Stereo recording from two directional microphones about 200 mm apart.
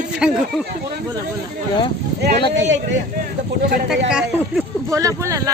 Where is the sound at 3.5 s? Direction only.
60° right (ahead or behind).